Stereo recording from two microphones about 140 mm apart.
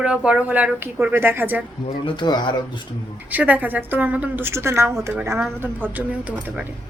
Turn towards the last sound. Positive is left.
turn(degrees=-10)  # may be behind; listen again after turning